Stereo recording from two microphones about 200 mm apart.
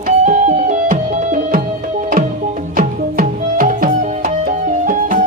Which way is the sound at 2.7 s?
45° right (ahead or behind).